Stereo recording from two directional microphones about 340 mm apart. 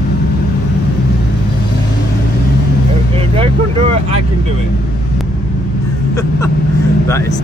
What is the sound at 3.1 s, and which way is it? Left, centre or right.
Speech, centre.